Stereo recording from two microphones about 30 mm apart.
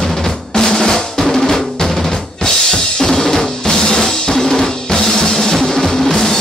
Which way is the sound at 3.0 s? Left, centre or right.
Centre.